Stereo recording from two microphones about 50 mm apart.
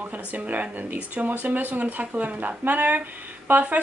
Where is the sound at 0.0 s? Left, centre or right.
Right.